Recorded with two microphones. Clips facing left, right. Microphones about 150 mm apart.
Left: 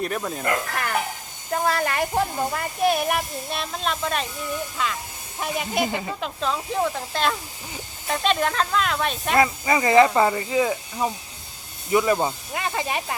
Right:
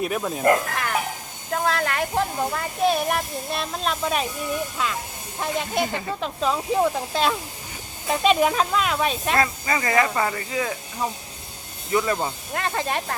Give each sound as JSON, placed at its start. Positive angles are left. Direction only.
{"t": 0.0, "sound": "speech", "side_deg": -5}
{"t": 1.5, "sound": "speech", "side_deg": 10}
{"t": 9.4, "sound": "speech", "side_deg": 15}
{"t": 12.5, "sound": "speech", "side_deg": 5}